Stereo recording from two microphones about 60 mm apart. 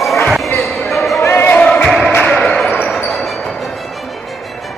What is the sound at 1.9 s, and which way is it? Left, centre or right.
Music, centre.